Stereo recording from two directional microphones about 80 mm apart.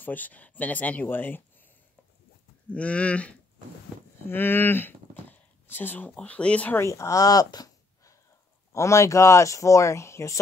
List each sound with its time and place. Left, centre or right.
0.0 s speech: left
2.7 s speech: centre
4.3 s speech: left
6.8 s speech: left
8.7 s speech: left